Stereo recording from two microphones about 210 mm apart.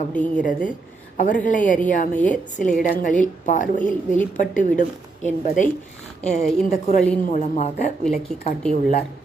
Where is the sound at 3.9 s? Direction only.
10° left (ahead or behind).